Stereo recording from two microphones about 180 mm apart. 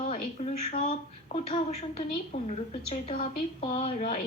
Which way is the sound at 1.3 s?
35° left (ahead or behind).